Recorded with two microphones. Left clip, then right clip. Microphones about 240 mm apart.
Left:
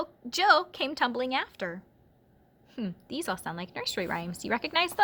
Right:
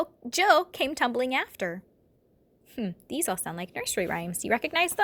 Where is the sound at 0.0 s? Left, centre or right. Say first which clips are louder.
Right 1 dB; centre.